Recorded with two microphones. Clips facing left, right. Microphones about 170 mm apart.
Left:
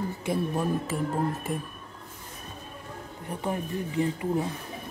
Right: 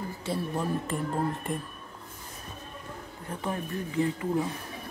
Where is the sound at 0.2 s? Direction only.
15° left (ahead or behind).